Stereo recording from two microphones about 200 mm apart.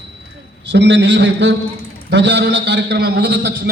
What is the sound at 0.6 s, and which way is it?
A man's voice, 60° right (ahead or behind).